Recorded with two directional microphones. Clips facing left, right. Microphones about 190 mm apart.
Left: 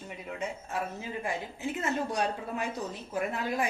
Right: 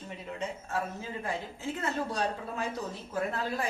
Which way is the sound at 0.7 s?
15° left (ahead or behind).